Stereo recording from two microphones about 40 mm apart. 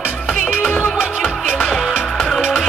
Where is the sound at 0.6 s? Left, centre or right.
Left.